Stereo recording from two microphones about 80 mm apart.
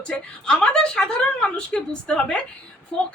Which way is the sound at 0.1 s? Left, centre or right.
Centre.